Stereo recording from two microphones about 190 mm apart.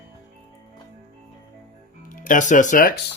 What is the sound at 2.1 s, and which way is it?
Speech, 45° left (ahead or behind).